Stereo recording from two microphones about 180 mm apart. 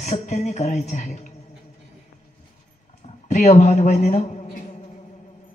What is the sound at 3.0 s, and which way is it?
A man's voice, 40° left (ahead or behind).